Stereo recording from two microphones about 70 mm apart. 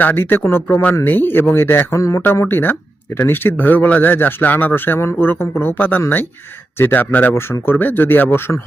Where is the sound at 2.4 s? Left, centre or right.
Left.